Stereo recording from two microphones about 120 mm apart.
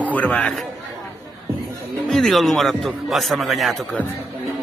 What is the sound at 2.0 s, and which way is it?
Speech, 5° left (ahead or behind).